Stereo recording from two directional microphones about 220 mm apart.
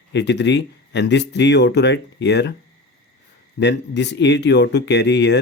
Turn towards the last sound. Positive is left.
turn(degrees=50)  # may be behind; listen again after turning